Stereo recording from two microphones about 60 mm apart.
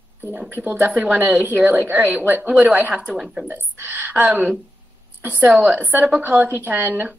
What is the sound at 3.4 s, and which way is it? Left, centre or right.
A woman's voice, right.